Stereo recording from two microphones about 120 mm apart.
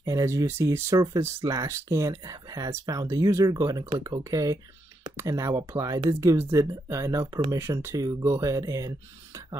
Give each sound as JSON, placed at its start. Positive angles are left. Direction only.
{"t": 0.0, "sound": "speech", "side_deg": -25}